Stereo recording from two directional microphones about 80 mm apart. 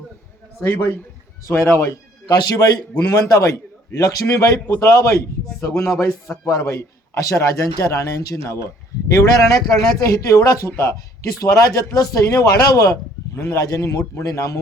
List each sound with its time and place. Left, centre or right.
1.5 s a man's voice: left
2.2 s a man's voice: left
3.1 s a man's voice: left